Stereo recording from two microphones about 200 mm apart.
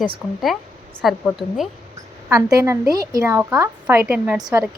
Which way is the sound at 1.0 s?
Centre (ahead or behind).